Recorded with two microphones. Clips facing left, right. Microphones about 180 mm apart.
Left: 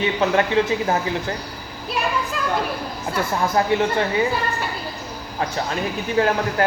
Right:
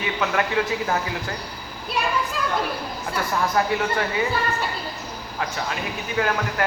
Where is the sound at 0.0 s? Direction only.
30° left (ahead or behind).